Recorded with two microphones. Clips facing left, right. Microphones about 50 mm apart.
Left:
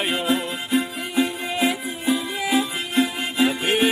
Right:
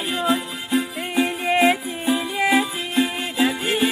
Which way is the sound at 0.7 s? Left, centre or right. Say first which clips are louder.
Right 1 dB; right.